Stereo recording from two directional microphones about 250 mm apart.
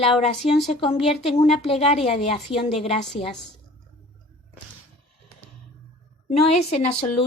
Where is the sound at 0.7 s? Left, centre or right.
Left.